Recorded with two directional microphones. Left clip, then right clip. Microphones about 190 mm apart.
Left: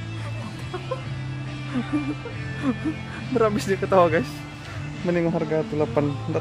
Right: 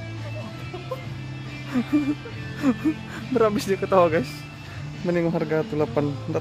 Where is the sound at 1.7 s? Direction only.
25° right (ahead or behind).